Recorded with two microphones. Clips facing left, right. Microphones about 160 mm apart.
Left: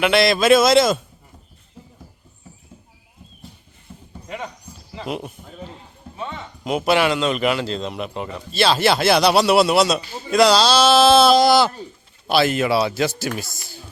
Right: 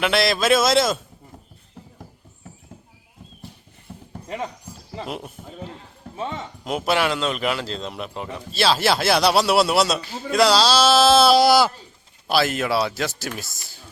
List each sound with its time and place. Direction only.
0.0 s a man's voice: centre (ahead or behind)
5.0 s a man's voice: centre (ahead or behind)
6.1 s speech: 35° right (ahead or behind)
6.7 s a man's voice: centre (ahead or behind)